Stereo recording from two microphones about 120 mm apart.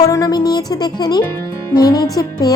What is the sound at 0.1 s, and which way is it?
A woman's voice, 30° left (ahead or behind).